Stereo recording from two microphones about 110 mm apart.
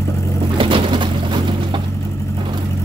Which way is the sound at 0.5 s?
50° right (ahead or behind).